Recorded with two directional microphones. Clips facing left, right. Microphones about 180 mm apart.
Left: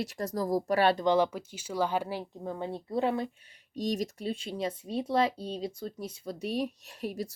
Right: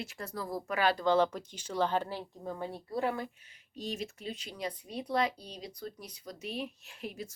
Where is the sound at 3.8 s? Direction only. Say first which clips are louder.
Left 7 dB; 40° left (ahead or behind).